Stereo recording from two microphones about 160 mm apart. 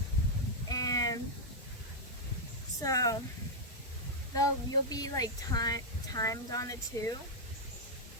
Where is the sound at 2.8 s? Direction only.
20° left (ahead or behind).